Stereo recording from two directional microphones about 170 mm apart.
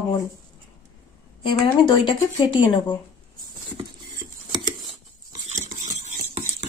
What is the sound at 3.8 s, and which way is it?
Patter, 25° right (ahead or behind).